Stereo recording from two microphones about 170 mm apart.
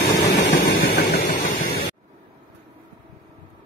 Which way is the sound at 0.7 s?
65° left (ahead or behind).